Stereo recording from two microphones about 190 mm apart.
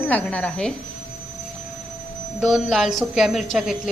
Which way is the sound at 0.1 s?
10° left (ahead or behind).